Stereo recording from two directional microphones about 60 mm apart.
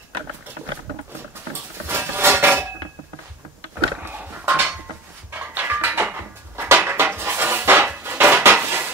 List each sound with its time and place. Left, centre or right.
1.9 s rub: right
4.0 s dog: right
5.3 s a sound: right